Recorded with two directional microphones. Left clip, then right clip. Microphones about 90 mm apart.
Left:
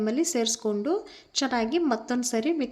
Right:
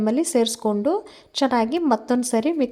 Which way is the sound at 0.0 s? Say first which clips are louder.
Right 6 dB; 60° right (ahead or behind).